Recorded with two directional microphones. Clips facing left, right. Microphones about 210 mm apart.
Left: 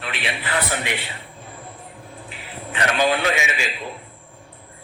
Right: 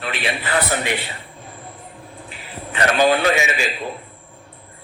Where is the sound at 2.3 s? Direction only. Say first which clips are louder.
Right 1 dB; 40° right (ahead or behind).